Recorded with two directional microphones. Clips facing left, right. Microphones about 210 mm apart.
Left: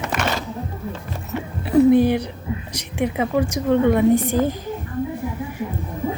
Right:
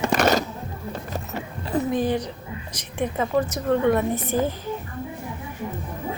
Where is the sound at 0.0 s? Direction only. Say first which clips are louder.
Right 4 dB; 35° right (ahead or behind).